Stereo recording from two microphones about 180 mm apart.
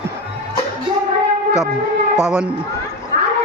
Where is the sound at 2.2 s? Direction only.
5° right (ahead or behind).